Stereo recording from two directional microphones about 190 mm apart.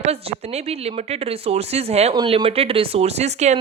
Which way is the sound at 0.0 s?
35° right (ahead or behind).